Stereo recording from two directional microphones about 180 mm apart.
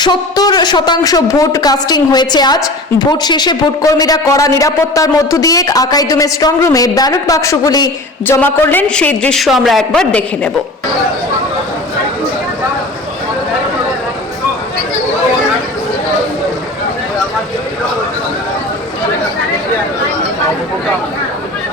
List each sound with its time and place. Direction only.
0.0 s a woman's voice: 20° left (ahead or behind); by 10.5 s 5° left (ahead or behind)